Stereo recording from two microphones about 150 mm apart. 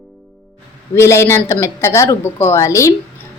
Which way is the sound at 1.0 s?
15° left (ahead or behind).